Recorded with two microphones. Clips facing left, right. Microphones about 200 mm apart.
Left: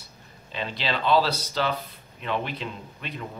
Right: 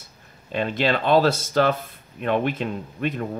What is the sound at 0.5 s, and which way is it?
Speech, 50° right (ahead or behind).